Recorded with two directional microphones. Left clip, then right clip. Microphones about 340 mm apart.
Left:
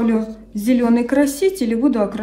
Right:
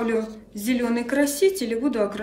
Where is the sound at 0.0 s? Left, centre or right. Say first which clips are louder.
Left 4 dB; centre.